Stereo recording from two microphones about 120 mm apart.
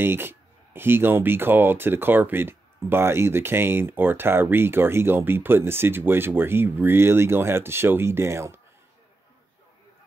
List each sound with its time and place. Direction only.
0.0 s speech: 20° right (ahead or behind)